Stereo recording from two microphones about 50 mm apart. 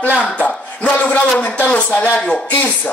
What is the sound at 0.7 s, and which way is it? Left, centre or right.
Speech, left.